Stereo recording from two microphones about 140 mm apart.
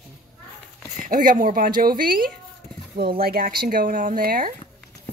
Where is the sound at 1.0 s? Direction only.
70° right (ahead or behind); by 4.5 s 90° right.